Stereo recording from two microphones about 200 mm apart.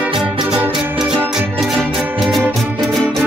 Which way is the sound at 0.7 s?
Centre (ahead or behind).